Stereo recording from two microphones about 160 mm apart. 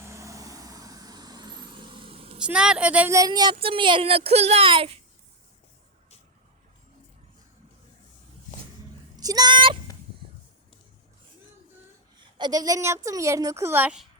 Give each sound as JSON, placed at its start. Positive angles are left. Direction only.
{"t": 0.0, "sound": "vehicle", "side_deg": -20}
{"t": 2.4, "sound": "speech", "side_deg": -5}
{"t": 3.2, "sound": "speech", "side_deg": -25}
{"t": 9.1, "sound": "a sound", "side_deg": -25}
{"t": 12.4, "sound": "speech", "side_deg": -25}